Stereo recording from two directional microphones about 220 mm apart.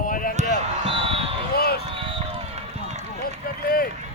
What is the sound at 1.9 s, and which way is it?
Run, 25° right (ahead or behind).